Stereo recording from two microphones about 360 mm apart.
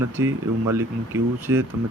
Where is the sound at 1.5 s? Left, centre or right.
Centre.